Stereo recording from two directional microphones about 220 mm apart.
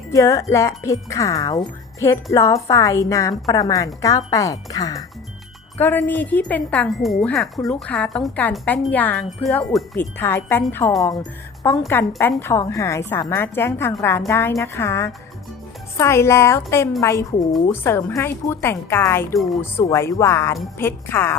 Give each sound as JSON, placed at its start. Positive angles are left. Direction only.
{"t": 0.1, "sound": "a woman's voice", "side_deg": 15}